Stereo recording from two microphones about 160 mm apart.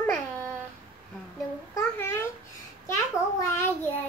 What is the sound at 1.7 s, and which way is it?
Babbling, 15° left (ahead or behind).